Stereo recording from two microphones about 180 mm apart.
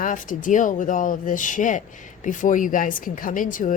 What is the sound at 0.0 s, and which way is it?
Speech, 45° left (ahead or behind).